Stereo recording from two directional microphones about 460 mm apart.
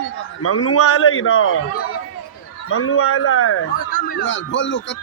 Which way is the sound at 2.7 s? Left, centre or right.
Left.